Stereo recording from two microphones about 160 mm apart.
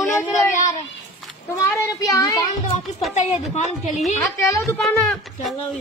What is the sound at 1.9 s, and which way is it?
Speech, 20° left (ahead or behind).